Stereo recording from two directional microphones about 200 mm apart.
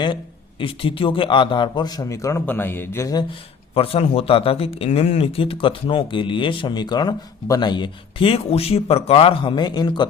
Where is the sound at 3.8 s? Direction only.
30° left (ahead or behind).